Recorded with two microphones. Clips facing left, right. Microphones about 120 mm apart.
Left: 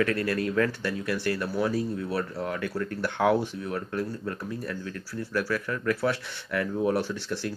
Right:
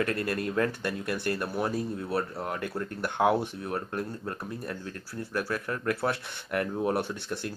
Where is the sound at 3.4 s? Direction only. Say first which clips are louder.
Left 2 dB; 55° right (ahead or behind).